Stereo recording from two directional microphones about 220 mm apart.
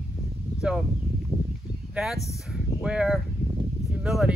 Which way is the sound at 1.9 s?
5° right (ahead or behind).